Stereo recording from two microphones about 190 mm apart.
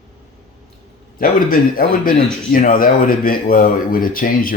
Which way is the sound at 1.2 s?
50° left (ahead or behind).